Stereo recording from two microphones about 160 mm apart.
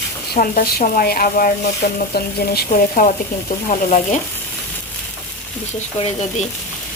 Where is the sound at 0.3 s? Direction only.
60° left (ahead or behind).